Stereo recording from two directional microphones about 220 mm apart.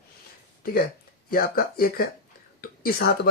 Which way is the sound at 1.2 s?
40° left (ahead or behind).